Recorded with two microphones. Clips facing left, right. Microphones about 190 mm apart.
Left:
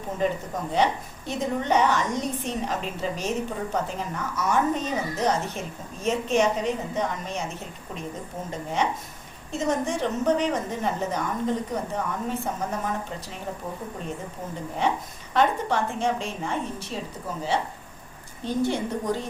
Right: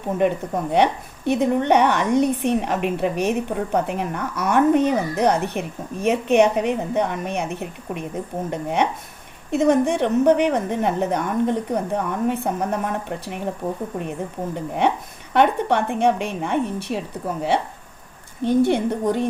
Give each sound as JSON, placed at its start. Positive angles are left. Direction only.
{"t": 0.2, "sound": "a woman's voice", "side_deg": -65}
{"t": 14.8, "sound": "a woman's voice", "side_deg": -60}